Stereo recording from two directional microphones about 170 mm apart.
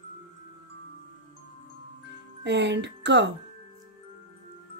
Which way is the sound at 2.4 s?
90° right.